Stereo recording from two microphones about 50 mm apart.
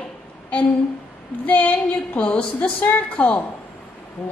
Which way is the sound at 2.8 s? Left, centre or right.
Left.